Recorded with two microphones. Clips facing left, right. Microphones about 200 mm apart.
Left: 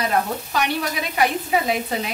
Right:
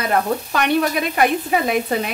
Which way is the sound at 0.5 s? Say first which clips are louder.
Right 5 dB; 55° right (ahead or behind).